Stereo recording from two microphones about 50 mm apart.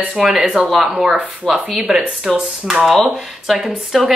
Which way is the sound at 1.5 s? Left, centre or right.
Centre.